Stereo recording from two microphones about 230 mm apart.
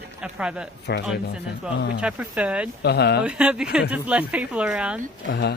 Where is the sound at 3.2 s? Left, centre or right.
Centre.